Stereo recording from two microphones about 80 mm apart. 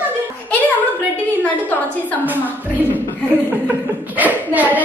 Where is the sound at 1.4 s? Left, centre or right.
Left.